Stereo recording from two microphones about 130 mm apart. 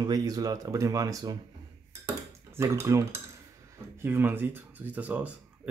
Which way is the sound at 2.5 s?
20° right (ahead or behind).